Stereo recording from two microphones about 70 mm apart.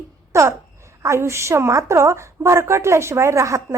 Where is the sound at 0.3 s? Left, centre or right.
Right.